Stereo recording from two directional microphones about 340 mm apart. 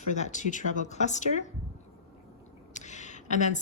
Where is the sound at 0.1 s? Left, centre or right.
Left.